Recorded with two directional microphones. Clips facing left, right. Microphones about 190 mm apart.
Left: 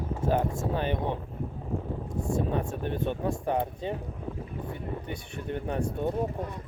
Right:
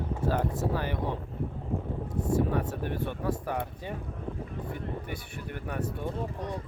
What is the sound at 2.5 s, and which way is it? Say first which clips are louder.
Speech: left 1 dB; 20° left (ahead or behind).